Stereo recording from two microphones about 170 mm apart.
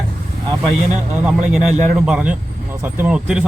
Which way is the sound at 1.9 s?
5° right (ahead or behind).